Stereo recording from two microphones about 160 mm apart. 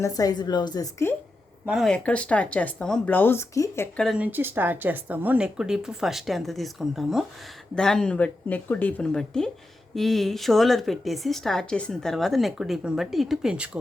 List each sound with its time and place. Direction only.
0.0 s a woman's voice: 20° left (ahead or behind)
1.6 s speech: centre (ahead or behind); by 3.8 s 20° left (ahead or behind)
3.9 s speech: centre (ahead or behind)
4.2 s speech: 10° right (ahead or behind)